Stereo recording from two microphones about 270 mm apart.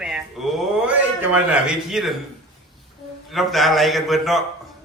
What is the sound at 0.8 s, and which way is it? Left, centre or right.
A woman's voice, centre.